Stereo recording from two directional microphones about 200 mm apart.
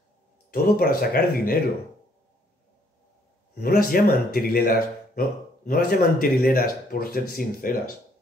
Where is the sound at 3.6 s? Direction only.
45° left (ahead or behind).